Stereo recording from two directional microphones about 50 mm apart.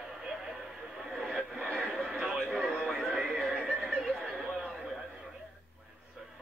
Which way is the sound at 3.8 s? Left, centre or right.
Centre.